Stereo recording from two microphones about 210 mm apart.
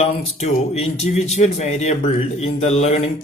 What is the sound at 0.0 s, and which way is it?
Speech, 30° left (ahead or behind).